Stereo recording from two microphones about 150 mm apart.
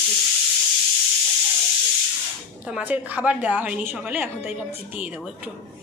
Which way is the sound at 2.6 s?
10° right (ahead or behind).